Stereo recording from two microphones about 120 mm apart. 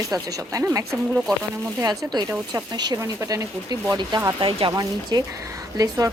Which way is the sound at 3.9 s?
40° right (ahead or behind).